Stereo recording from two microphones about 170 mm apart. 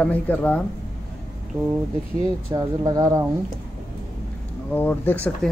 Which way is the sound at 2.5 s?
20° right (ahead or behind).